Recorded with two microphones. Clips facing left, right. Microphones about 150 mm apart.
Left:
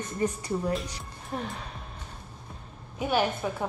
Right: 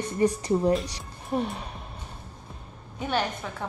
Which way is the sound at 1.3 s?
20° right (ahead or behind).